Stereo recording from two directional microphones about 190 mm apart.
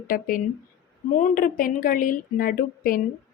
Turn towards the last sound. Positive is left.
turn(degrees=50)  # may be behind; listen again after turning